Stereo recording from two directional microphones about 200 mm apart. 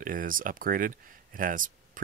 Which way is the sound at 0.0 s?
45° right (ahead or behind).